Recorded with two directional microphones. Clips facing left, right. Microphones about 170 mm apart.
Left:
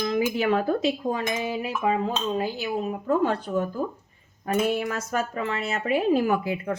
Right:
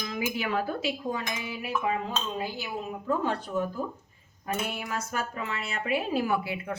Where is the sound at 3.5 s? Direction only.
45° left (ahead or behind).